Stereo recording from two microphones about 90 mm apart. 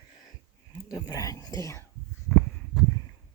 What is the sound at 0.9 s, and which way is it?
Speech, 40° left (ahead or behind).